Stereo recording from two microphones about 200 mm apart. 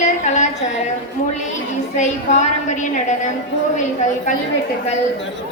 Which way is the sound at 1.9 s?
35° left (ahead or behind).